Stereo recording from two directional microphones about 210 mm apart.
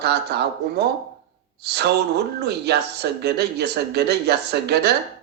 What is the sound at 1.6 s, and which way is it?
Speech, 50° right (ahead or behind).